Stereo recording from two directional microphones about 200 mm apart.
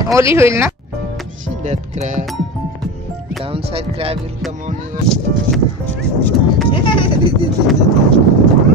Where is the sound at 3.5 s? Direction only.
30° right (ahead or behind).